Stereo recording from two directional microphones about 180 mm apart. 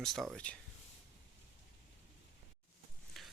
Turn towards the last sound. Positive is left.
turn(degrees=0)  # may be behind; listen again after turning